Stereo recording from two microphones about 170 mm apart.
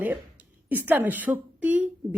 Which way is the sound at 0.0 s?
10° right (ahead or behind).